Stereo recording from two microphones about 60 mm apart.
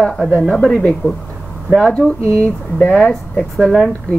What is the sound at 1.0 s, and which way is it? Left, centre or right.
Speech, left.